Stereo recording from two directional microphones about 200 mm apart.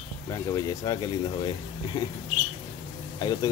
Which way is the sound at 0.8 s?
20° left (ahead or behind).